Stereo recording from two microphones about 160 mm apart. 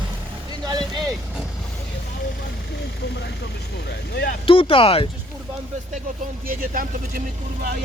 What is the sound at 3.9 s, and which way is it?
Speech, 90° left.